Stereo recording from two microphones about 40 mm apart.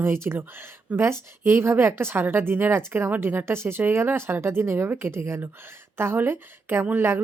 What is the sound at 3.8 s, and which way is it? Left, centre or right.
A woman's voice, right.